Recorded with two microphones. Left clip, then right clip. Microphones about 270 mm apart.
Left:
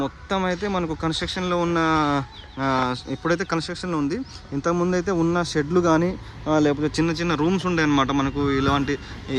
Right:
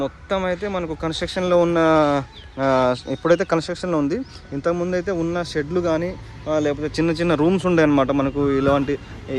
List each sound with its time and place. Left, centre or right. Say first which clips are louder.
0.0 s speech: right 2 dB; centre
7.0 s speech: right 7 dB; centre